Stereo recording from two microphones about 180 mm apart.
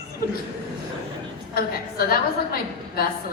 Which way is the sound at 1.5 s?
55° left (ahead or behind).